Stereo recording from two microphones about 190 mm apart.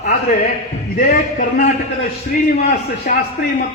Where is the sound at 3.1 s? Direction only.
50° left (ahead or behind).